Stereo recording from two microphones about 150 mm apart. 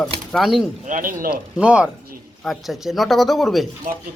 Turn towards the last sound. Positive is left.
turn(degrees=0)  # may be behind; listen again after turning